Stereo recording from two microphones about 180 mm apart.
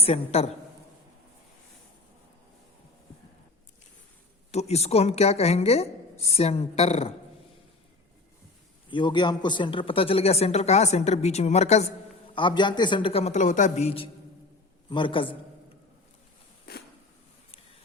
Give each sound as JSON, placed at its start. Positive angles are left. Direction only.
{"t": 0.0, "sound": "speech", "side_deg": 35}
{"t": 4.5, "sound": "speech", "side_deg": 35}
{"t": 8.9, "sound": "speech", "side_deg": 25}
{"t": 12.3, "sound": "a woman's voice", "side_deg": 25}
{"t": 16.7, "sound": "a sound", "side_deg": 60}